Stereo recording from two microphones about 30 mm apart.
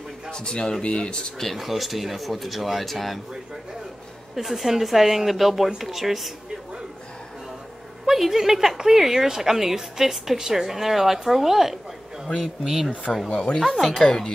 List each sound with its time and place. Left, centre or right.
0.3 s speech: left
1.6 s speech: centre
4.4 s a woman's voice: centre
8.1 s a woman's voice: centre
13.3 s speech: left
13.7 s speech: centre
14.0 s speech: left